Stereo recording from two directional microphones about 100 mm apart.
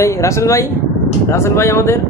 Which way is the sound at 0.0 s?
30° left (ahead or behind).